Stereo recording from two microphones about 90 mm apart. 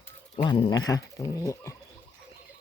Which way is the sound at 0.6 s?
45° left (ahead or behind).